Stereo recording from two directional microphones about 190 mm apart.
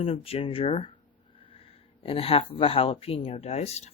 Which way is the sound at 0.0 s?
30° left (ahead or behind).